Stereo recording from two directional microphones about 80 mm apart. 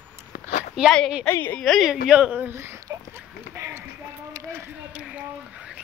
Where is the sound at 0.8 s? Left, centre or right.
Centre.